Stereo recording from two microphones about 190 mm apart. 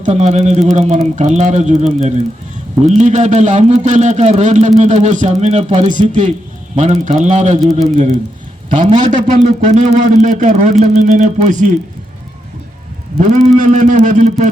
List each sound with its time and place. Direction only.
0.0 s a man's voice: 35° right (ahead or behind)
13.1 s a man's voice: 40° right (ahead or behind)